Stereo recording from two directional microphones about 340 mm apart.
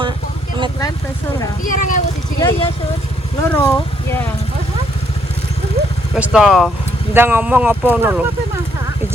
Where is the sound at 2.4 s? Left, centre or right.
Centre.